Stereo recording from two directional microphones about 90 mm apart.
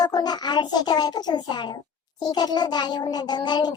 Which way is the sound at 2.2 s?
50° left (ahead or behind).